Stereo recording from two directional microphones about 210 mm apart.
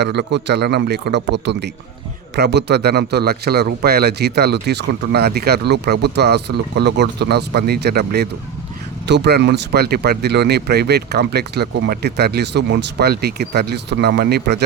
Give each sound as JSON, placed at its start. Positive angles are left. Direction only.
{"t": 0.0, "sound": "a man's voice", "side_deg": -55}